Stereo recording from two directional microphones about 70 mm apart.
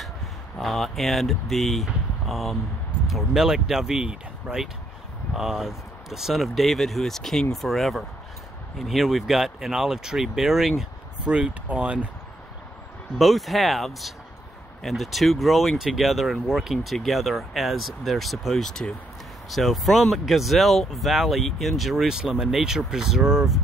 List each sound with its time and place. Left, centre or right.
0.6 s speech: centre
11.2 s speech: centre
13.2 s speech: centre